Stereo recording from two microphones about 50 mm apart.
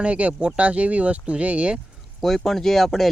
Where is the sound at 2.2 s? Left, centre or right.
Centre.